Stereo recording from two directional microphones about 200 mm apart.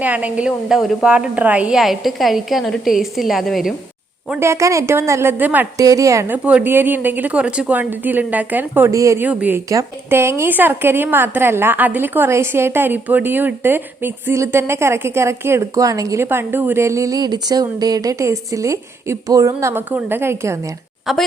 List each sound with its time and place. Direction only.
0.0 s a woman's voice: 5° right (ahead or behind)
4.3 s a woman's voice: 15° right (ahead or behind)
21.1 s a woman's voice: centre (ahead or behind)